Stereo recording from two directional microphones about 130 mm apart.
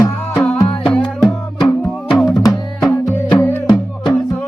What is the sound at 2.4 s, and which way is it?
Music, 25° left (ahead or behind).